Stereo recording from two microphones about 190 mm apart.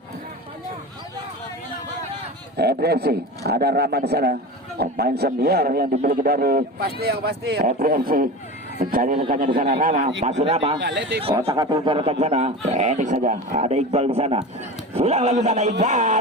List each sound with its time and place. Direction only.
2.6 s a man's voice: 55° right (ahead or behind); by 10.8 s 30° right (ahead or behind)
10.8 s a man's voice: 65° right (ahead or behind)
11.4 s a man's voice: 20° right (ahead or behind); by 16.1 s 40° right (ahead or behind)